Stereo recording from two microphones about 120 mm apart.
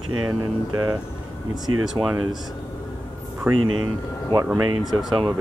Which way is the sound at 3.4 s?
15° right (ahead or behind).